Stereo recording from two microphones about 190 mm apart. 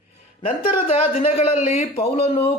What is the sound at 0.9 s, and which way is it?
Speech, 30° left (ahead or behind).